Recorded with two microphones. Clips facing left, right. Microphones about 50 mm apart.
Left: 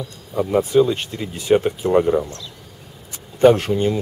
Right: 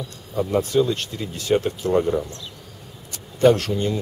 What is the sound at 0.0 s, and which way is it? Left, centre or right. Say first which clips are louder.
Speech: left 2 dB; centre.